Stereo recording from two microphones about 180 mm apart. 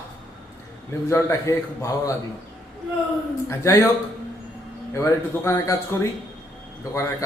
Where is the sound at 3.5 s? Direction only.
15° left (ahead or behind).